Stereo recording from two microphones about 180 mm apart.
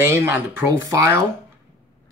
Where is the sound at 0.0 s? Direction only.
15° right (ahead or behind).